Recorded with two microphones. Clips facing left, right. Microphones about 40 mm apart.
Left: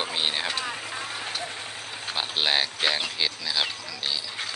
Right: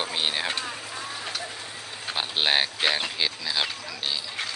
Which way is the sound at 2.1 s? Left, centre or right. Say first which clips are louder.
Right 1 dB; centre.